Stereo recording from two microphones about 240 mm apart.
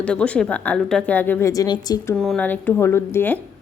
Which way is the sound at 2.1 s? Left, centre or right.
Centre.